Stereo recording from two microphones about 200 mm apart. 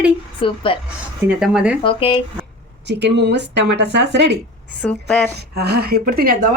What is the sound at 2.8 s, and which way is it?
Speech, 60° right (ahead or behind).